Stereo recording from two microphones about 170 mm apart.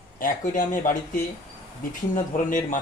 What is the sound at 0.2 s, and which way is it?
Speech, 50° left (ahead or behind).